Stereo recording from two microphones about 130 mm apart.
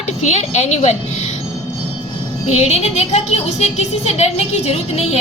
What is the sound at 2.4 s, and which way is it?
A woman's voice, 55° left (ahead or behind).